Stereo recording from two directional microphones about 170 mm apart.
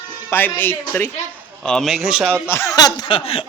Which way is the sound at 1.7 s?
Centre (ahead or behind).